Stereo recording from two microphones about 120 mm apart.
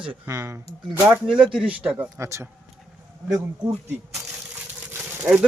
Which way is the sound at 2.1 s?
25° right (ahead or behind).